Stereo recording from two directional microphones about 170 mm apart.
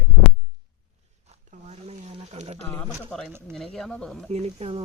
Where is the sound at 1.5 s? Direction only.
40° right (ahead or behind).